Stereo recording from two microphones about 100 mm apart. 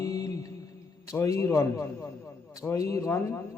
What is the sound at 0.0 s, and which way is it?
Mantra, 35° left (ahead or behind).